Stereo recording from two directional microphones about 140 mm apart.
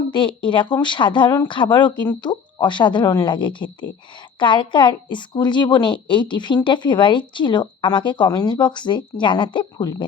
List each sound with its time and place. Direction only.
0.1 s a woman's voice: 35° left (ahead or behind)